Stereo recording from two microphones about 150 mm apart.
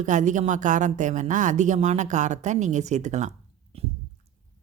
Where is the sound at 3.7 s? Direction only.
40° right (ahead or behind).